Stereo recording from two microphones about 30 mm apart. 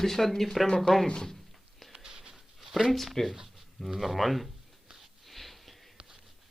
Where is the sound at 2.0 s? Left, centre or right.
Centre.